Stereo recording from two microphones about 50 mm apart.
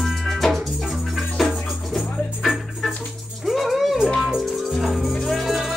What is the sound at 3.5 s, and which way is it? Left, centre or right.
Music, centre.